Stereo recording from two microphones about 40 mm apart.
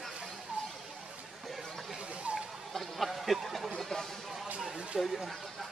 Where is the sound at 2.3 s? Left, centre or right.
Right.